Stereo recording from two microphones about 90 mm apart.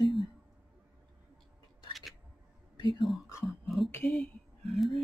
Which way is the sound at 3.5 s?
Centre (ahead or behind).